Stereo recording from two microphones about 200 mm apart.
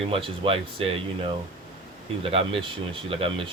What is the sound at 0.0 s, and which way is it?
Speech, 25° right (ahead or behind).